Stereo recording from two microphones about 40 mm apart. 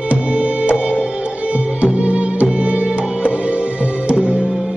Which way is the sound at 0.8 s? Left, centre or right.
Right.